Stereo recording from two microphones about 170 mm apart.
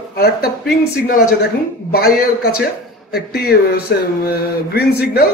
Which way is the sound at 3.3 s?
65° left (ahead or behind).